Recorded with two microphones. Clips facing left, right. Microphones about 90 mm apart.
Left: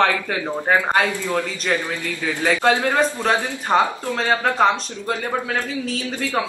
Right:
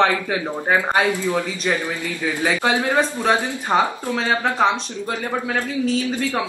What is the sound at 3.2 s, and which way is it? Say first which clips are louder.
Speech: right 1 dB; 5° right (ahead or behind).